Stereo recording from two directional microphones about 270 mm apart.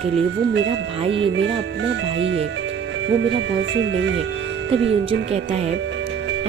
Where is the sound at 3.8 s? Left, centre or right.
Right.